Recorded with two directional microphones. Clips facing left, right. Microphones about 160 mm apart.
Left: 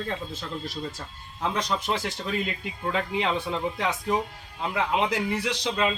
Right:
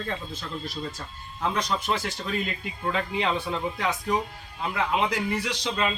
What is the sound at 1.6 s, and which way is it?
A man's voice, 20° left (ahead or behind).